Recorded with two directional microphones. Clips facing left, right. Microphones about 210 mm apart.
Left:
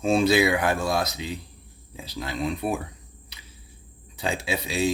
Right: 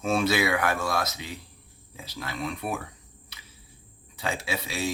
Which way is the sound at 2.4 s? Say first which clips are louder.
Left 5 dB; 30° left (ahead or behind).